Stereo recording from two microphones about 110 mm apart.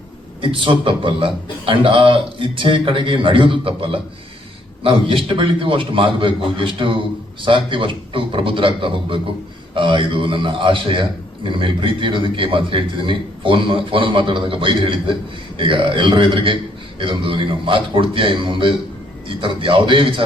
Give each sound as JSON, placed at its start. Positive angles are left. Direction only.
{"t": 0.4, "sound": "a man's voice", "side_deg": -50}